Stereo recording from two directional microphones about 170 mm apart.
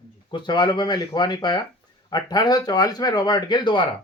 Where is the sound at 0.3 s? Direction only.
25° left (ahead or behind).